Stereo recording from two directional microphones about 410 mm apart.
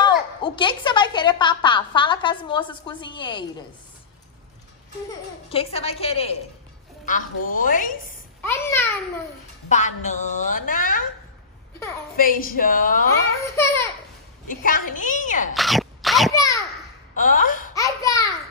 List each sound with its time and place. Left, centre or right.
0.0 s a woman's voice: centre
5.5 s a woman's voice: centre
8.4 s a child's voice: centre
9.7 s a woman's voice: centre
12.2 s a woman's voice: left
13.4 s a woman's voice: centre
14.5 s a woman's voice: centre
15.5 s sneeze: centre
17.1 s a woman's voice: centre
17.7 s a child's voice: centre